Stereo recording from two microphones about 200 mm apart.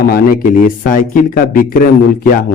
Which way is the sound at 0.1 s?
45° left (ahead or behind).